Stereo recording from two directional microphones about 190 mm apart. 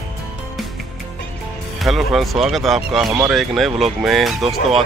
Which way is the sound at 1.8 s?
Centre (ahead or behind).